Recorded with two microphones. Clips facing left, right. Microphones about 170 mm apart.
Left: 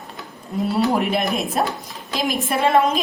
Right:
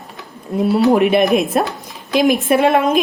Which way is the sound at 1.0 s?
65° right (ahead or behind).